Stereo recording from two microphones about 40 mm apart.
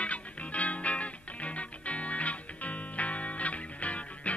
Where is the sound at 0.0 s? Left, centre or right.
Left.